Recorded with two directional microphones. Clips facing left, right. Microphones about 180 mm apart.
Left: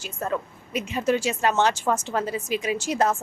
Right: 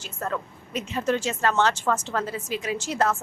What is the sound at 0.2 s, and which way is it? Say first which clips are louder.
A woman's voice: left 2 dB; 15° left (ahead or behind).